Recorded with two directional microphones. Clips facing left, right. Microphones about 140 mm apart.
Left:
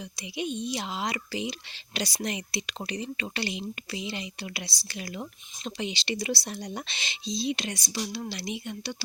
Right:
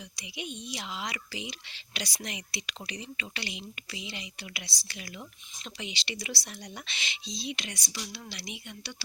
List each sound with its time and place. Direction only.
0.2 s a woman's voice: 35° left (ahead or behind)